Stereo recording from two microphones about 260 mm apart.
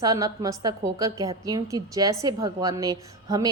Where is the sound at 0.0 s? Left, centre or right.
Centre.